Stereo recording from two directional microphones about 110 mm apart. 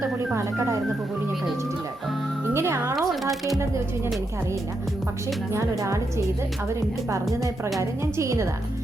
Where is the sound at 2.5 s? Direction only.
25° right (ahead or behind).